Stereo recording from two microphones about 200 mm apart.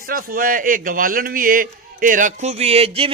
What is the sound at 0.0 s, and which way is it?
A man's voice, 45° right (ahead or behind).